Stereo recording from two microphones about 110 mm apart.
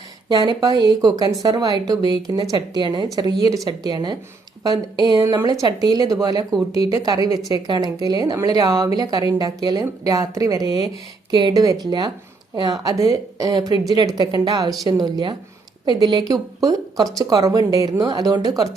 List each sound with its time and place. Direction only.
0.3 s speech: 40° right (ahead or behind)
5.2 s a woman's voice: 30° right (ahead or behind)